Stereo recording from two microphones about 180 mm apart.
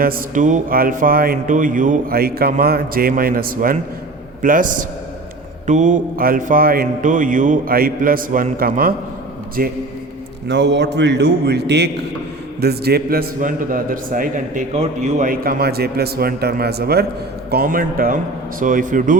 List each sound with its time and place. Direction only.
0.0 s speech: 50° right (ahead or behind)
10.5 s a man's voice: 80° right; by 19.1 s 45° right (ahead or behind)